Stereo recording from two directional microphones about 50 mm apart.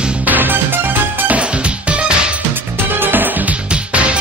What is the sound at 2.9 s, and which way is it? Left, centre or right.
Music, right.